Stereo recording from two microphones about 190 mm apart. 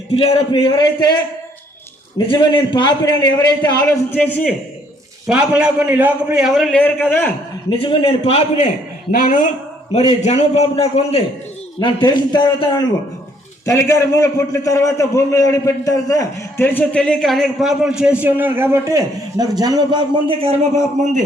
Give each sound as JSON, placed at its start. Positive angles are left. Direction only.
{"t": 0.1, "sound": "a man's voice", "side_deg": 30}
{"t": 2.1, "sound": "a man's voice", "side_deg": 25}
{"t": 4.1, "sound": "a man's voice", "side_deg": 10}
{"t": 5.2, "sound": "a man's voice", "side_deg": -5}
{"t": 7.7, "sound": "a man's voice", "side_deg": 25}
{"t": 9.1, "sound": "a man's voice", "side_deg": 45}